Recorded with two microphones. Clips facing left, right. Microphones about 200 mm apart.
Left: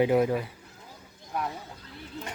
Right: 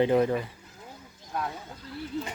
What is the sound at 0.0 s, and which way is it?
Speech, 5° left (ahead or behind).